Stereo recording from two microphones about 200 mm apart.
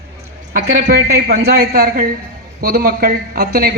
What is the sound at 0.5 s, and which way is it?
A man's voice, 50° right (ahead or behind).